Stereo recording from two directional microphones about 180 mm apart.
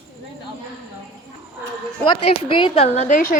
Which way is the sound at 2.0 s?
30° left (ahead or behind).